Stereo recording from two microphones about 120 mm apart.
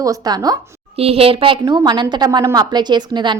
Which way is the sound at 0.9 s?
55° right (ahead or behind).